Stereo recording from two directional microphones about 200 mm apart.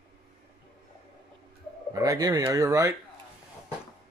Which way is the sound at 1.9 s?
15° right (ahead or behind).